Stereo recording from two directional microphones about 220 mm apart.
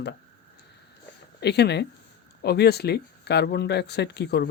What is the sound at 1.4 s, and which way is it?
Speech, 50° left (ahead or behind).